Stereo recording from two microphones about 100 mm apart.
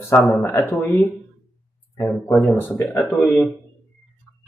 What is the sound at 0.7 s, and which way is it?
Speech, 20° left (ahead or behind).